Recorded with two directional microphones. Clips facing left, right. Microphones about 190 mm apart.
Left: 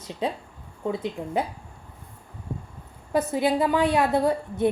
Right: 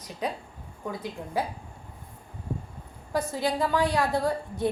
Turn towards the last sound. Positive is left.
turn(degrees=20)  # may be behind; listen again after turning